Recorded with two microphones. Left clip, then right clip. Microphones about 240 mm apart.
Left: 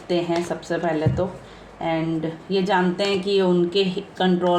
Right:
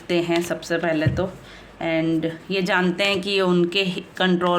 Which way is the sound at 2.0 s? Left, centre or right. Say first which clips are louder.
Right 3 dB; right.